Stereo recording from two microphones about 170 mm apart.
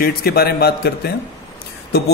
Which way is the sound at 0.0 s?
65° left (ahead or behind).